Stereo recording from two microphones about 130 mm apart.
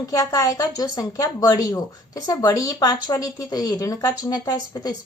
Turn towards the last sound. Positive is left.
turn(degrees=30)  # may be behind; listen again after turning